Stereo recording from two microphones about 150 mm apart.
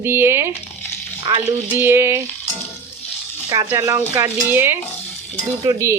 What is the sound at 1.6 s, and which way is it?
Speech, 15° right (ahead or behind).